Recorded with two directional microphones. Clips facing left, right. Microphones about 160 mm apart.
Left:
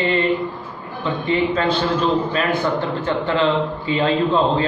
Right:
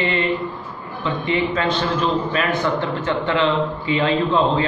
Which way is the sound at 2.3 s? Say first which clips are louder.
Left 1 dB; 35° left (ahead or behind).